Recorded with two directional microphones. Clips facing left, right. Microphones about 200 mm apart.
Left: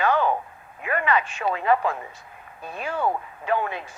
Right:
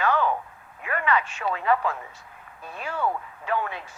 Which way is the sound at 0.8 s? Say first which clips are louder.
Left 2 dB; 20° left (ahead or behind).